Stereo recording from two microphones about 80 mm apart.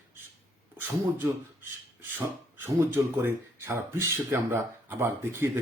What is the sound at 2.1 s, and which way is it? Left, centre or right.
Speech, right.